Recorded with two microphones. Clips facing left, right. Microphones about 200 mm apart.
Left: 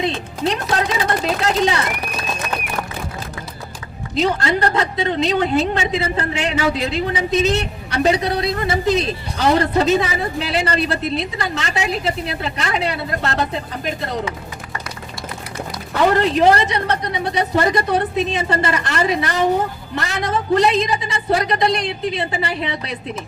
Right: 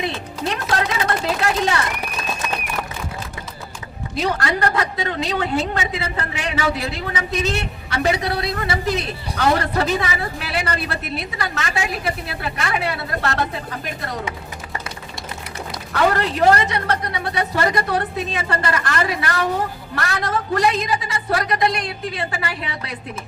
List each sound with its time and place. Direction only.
0.0 s music: 20° left (ahead or behind)
4.1 s a woman's voice: 20° left (ahead or behind)
16.1 s a woman's voice: 20° left (ahead or behind)